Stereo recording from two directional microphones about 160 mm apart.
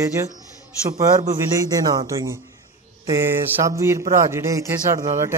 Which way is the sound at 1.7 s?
25° right (ahead or behind).